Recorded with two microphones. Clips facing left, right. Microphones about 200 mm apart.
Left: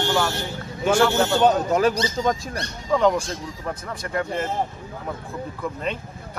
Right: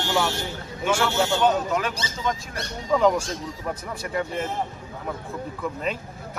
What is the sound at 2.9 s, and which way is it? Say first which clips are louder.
Speech: left 1 dB; 5° right (ahead or behind).